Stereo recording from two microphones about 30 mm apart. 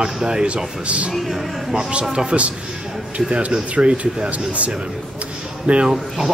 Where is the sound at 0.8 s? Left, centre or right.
Right.